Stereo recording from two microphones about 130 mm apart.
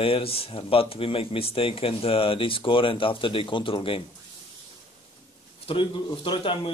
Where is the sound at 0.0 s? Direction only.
45° left (ahead or behind).